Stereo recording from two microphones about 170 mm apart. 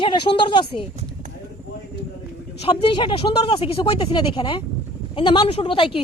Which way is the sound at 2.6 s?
30° left (ahead or behind).